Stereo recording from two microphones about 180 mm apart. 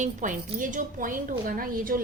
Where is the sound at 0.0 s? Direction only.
45° right (ahead or behind).